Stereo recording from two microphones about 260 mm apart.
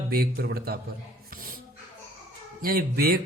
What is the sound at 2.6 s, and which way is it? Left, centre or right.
Speech, right.